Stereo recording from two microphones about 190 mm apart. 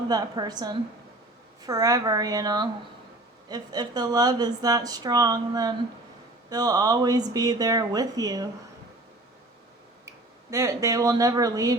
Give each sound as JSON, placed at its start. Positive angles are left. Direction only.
{"t": 0.1, "sound": "a woman's voice", "side_deg": -20}
{"t": 10.1, "sound": "speech", "side_deg": -15}